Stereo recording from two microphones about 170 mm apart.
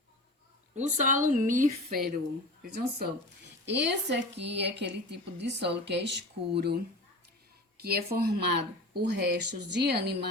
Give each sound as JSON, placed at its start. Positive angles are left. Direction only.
{"t": 0.8, "sound": "speech", "side_deg": -45}
{"t": 3.7, "sound": "a woman's voice", "side_deg": -90}
{"t": 7.8, "sound": "speech", "side_deg": -65}